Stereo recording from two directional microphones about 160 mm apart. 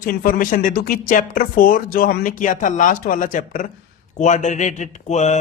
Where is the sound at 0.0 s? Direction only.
65° left (ahead or behind).